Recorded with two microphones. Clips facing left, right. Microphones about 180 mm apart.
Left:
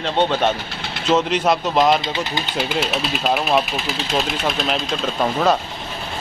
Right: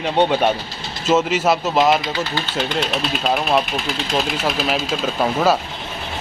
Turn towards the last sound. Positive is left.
turn(degrees=-5)  # may be behind; listen again after turning